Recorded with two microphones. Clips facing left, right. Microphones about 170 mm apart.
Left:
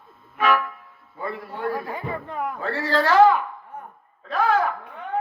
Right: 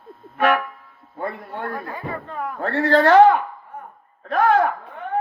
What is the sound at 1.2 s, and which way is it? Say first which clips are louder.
Music: right 2 dB; 60° right (ahead or behind).